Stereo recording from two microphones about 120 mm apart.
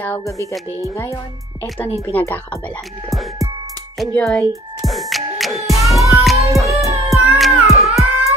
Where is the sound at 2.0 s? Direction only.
15° left (ahead or behind).